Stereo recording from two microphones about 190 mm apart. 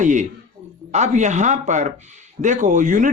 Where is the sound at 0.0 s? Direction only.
40° right (ahead or behind).